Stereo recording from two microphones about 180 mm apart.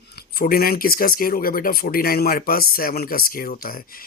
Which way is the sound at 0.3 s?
55° left (ahead or behind).